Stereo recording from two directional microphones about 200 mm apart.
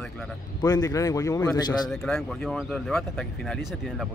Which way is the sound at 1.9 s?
Centre (ahead or behind).